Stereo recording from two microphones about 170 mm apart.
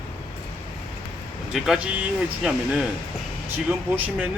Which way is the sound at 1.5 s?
5° right (ahead or behind).